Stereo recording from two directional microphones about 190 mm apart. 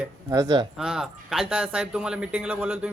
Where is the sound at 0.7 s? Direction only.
Centre (ahead or behind).